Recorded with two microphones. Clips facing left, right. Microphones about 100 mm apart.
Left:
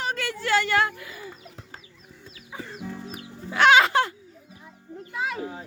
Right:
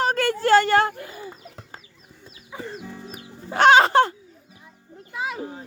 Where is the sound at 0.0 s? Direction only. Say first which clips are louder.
Right 8 dB; 40° right (ahead or behind).